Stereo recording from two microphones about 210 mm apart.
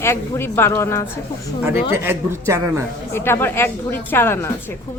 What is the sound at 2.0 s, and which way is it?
Speech, 10° right (ahead or behind).